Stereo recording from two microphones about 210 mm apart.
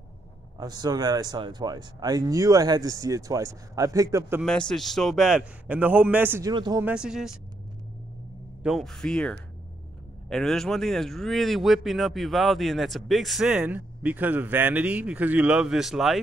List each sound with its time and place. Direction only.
0.6 s speech: 20° right (ahead or behind)
4.4 s speech: 5° left (ahead or behind)
6.5 s speech: 20° right (ahead or behind)
6.8 s speech: 5° right (ahead or behind)
8.6 s speech: centre (ahead or behind)